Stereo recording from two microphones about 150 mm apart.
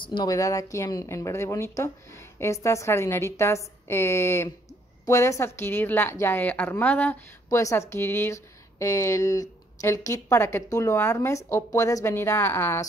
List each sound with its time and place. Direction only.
0.0 s a woman's voice: 30° left (ahead or behind); by 7.2 s 10° left (ahead or behind)
7.4 s a woman's voice: 20° left (ahead or behind)